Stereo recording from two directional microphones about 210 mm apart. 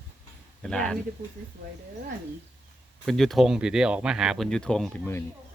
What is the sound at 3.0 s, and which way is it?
Speech, centre (ahead or behind).